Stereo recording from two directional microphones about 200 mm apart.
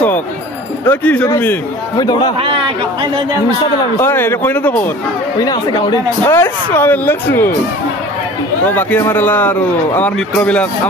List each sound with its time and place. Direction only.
0.8 s a man's voice: 10° left (ahead or behind)
2.3 s a man's voice: 25° right (ahead or behind)
4.0 s a man's voice: 10° left (ahead or behind)
5.4 s a man's voice: 20° left (ahead or behind)
8.6 s a man's voice: 10° left (ahead or behind)